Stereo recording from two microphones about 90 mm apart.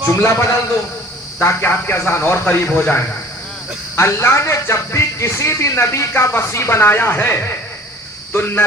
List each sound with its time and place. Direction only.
0.1 s speech: 30° left (ahead or behind)
3.9 s speech: 30° left (ahead or behind)